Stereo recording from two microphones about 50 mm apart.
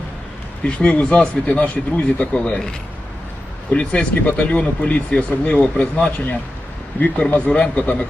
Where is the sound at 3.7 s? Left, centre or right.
Left.